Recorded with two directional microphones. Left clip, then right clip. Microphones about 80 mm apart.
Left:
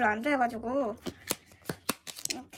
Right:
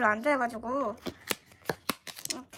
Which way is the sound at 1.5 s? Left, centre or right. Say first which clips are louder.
Right 5 dB; centre.